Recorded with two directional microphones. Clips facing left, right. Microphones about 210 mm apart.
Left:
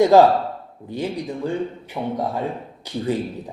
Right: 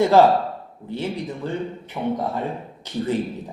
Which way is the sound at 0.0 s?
15° left (ahead or behind).